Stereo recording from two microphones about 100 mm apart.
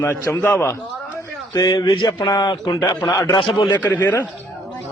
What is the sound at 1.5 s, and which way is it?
A man's voice, 45° left (ahead or behind).